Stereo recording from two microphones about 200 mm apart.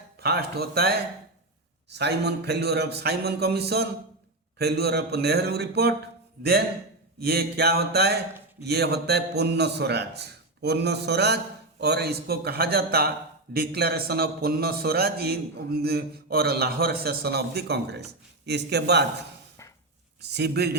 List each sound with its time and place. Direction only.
0.2 s a man's voice: 55° right (ahead or behind)
20.3 s a man's voice: 55° right (ahead or behind)